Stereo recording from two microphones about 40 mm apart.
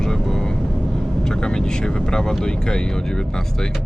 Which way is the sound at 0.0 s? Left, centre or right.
Centre.